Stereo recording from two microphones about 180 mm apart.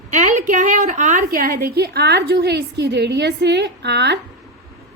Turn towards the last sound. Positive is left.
turn(degrees=-70)  # may be behind; listen again after turning